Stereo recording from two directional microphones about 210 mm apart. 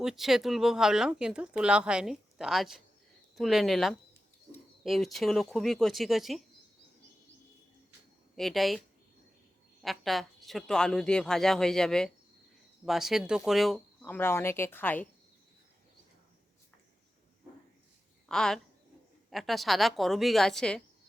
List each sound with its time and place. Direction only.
0.0 s speech: centre (ahead or behind)
8.4 s speech: centre (ahead or behind)
9.8 s speech: centre (ahead or behind)
18.3 s speech: 5° left (ahead or behind)